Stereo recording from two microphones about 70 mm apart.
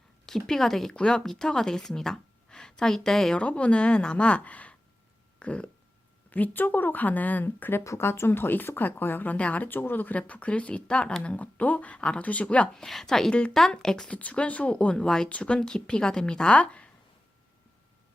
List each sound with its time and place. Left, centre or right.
0.3 s speech: centre
3.4 s speech: centre
5.4 s a sound: centre
6.3 s speech: left
12.8 s a woman's voice: centre
14.2 s speech: centre